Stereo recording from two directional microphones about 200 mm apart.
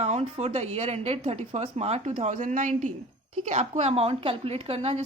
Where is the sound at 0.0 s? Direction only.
35° right (ahead or behind).